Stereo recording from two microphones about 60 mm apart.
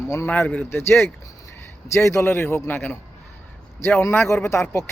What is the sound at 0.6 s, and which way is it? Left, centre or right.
A man's voice, left.